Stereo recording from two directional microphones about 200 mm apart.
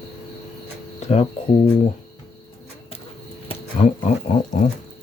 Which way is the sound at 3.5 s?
35° left (ahead or behind).